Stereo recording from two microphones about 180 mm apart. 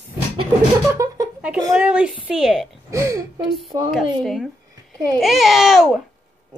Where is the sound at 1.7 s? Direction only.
5° right (ahead or behind).